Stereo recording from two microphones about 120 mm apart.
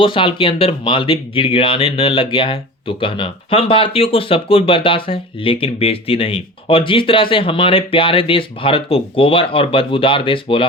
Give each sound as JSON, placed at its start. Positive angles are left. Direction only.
{"t": 0.0, "sound": "speech", "side_deg": 45}